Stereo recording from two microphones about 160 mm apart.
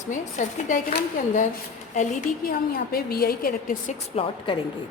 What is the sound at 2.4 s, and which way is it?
A woman's voice, 70° left (ahead or behind).